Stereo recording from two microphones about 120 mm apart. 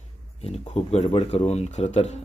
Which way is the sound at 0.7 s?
65° left (ahead or behind).